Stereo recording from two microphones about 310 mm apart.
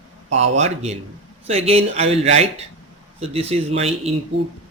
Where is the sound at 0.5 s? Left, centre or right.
Right.